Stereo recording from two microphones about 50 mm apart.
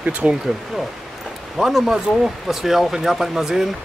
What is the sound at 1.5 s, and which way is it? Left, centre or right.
Speech, centre.